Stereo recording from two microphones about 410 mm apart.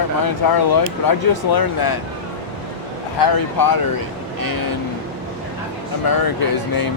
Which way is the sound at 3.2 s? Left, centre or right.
Left.